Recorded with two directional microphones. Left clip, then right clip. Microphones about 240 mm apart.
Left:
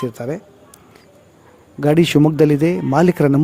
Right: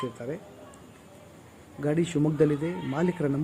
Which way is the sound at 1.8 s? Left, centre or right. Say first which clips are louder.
Left 13 dB; left.